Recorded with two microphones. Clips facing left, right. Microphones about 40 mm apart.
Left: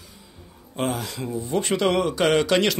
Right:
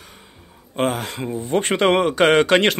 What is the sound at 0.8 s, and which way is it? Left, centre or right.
Speech, right.